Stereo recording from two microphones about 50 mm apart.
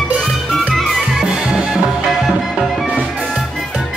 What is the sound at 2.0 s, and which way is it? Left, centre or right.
Music, centre.